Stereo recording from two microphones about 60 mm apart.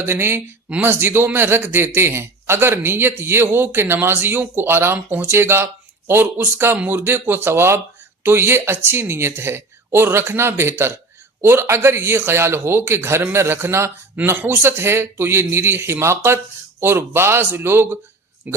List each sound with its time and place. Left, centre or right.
0.0 s a man's voice: right
14.3 s a man's voice: right
18.5 s speech: right